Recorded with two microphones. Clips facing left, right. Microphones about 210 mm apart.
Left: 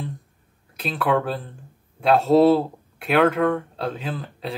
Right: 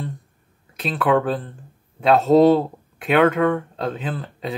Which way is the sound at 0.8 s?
Centre (ahead or behind).